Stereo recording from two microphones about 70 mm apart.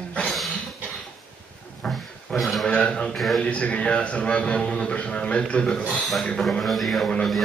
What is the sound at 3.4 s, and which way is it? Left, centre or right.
A man's voice, centre.